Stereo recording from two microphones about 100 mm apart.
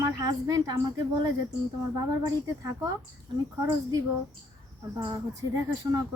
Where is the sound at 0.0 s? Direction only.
40° right (ahead or behind).